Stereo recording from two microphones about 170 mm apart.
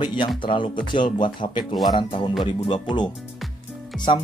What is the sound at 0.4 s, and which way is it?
Speech, 30° left (ahead or behind).